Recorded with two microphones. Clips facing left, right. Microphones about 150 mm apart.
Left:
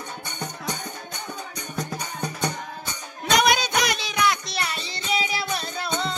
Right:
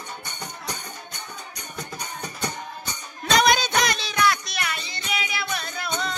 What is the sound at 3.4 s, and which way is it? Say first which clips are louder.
Music: right 2 dB; 10° left (ahead or behind).